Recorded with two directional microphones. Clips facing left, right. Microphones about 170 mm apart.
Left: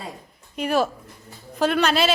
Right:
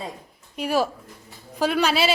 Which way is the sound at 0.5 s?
5° right (ahead or behind).